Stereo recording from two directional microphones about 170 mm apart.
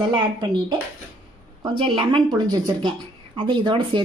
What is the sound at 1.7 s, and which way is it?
Speech, 30° right (ahead or behind).